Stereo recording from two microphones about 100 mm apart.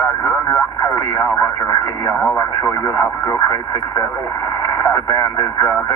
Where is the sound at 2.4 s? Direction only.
30° left (ahead or behind).